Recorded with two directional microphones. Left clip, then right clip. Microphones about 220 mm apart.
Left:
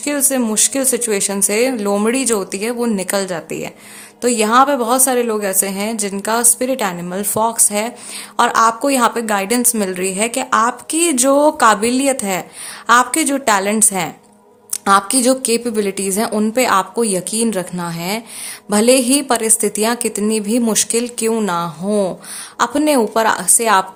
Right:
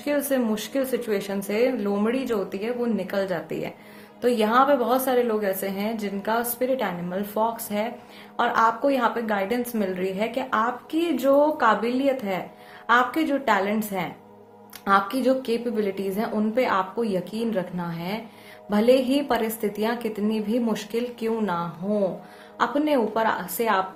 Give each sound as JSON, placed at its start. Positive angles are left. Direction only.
{"t": 0.0, "sound": "a woman's voice", "side_deg": 30}